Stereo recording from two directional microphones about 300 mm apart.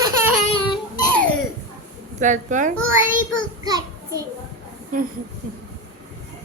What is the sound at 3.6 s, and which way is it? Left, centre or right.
Speech, centre.